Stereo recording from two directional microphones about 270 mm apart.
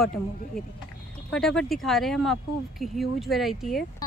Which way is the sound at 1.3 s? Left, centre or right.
Centre.